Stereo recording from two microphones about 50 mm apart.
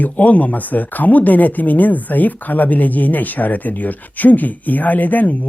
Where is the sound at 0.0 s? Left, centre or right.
Left.